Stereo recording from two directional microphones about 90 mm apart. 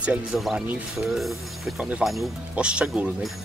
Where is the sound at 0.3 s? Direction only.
Centre (ahead or behind).